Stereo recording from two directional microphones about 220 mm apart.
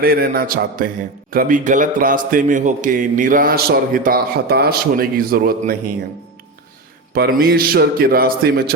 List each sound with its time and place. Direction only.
0.0 s a man's voice: 45° right (ahead or behind)
7.1 s a man's voice: 45° right (ahead or behind)